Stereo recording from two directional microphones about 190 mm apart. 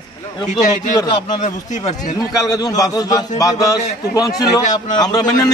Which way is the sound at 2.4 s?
20° left (ahead or behind).